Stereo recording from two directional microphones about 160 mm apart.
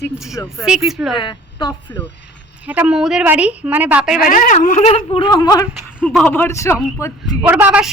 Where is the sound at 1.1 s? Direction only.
30° left (ahead or behind).